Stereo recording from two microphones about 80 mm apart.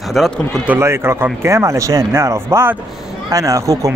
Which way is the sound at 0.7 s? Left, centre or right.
Right.